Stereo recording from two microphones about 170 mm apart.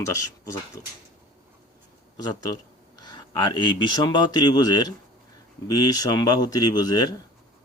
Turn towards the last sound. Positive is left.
turn(degrees=25)  # may be behind; listen again after turning